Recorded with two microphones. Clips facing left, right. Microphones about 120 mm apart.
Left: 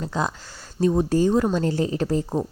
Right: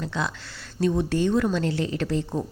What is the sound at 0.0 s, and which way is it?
A woman's voice, 40° left (ahead or behind).